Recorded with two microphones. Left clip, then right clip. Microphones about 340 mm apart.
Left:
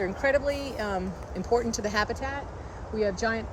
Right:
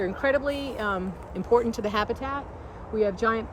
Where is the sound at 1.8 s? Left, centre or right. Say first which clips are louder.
Right 1 dB; right.